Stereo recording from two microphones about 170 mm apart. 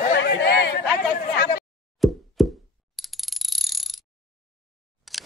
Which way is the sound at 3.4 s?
Centre (ahead or behind).